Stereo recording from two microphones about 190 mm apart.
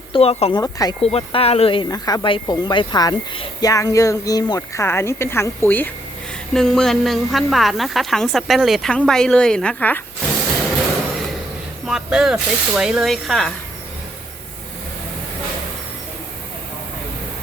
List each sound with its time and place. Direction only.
0.1 s speech: 30° left (ahead or behind)
0.6 s speech: 20° left (ahead or behind)
1.0 s a woman's voice: 30° left (ahead or behind); by 10.0 s 5° left (ahead or behind)
11.9 s a woman's voice: centre (ahead or behind)